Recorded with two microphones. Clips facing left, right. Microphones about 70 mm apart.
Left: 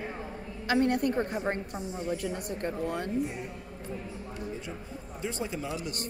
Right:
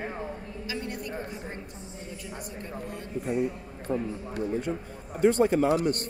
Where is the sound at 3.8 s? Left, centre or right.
Right.